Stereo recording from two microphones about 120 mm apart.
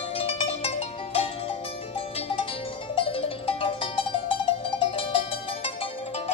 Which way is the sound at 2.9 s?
50° left (ahead or behind).